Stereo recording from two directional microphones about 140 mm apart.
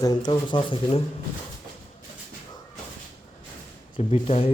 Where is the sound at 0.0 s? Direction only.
30° left (ahead or behind).